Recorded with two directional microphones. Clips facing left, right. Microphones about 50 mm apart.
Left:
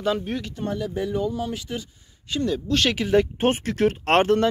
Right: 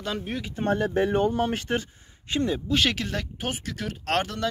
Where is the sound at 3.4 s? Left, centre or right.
Left.